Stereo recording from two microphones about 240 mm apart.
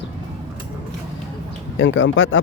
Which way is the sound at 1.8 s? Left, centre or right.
Left.